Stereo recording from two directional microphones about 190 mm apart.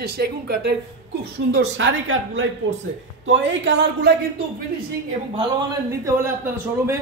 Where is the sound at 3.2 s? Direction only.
65° right (ahead or behind).